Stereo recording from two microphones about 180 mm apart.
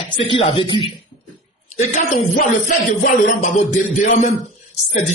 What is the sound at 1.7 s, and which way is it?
Music, 40° left (ahead or behind).